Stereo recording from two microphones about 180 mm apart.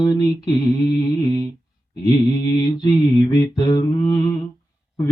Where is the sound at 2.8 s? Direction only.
20° left (ahead or behind).